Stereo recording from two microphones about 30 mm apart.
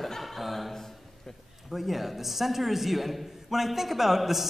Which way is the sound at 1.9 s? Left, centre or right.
Centre.